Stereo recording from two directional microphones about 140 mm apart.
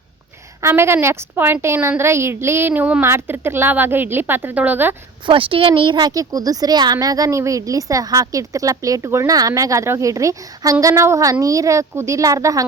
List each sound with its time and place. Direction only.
0.6 s speech: 15° right (ahead or behind)
5.2 s a woman's voice: 40° right (ahead or behind); by 12.6 s 25° right (ahead or behind)